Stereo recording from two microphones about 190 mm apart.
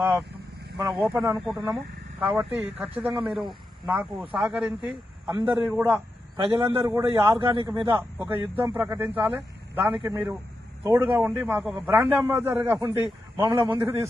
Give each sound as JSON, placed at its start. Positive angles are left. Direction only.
{"t": 0.0, "sound": "a man's voice", "side_deg": -5}
{"t": 5.3, "sound": "a man's voice", "side_deg": -15}
{"t": 6.3, "sound": "a man's voice", "side_deg": -30}
{"t": 6.6, "sound": "a man's voice", "side_deg": -10}
{"t": 7.2, "sound": "a man's voice", "side_deg": -25}
{"t": 8.2, "sound": "a man's voice", "side_deg": -10}